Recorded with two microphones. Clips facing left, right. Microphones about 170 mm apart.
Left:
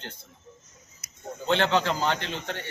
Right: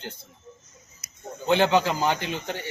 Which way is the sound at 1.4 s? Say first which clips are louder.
Right 3 dB; 10° right (ahead or behind).